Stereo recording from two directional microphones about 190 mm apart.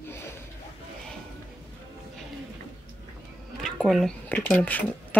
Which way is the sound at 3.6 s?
Centre (ahead or behind).